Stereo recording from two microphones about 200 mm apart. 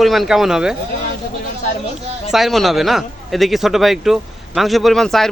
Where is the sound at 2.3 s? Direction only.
Centre (ahead or behind).